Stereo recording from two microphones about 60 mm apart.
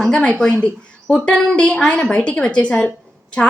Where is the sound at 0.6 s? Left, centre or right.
Centre.